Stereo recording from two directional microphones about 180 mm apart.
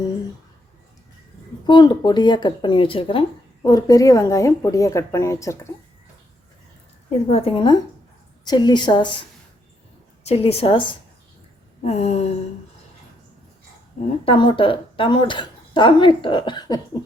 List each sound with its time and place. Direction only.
1.6 s a woman's voice: 25° left (ahead or behind)
7.3 s a woman's voice: 35° left (ahead or behind)
10.2 s a woman's voice: 35° left (ahead or behind)
14.3 s a woman's voice: 25° left (ahead or behind)